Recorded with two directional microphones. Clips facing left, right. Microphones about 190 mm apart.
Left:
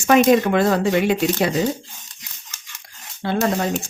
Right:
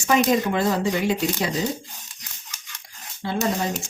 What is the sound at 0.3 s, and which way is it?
Speech, 65° left (ahead or behind).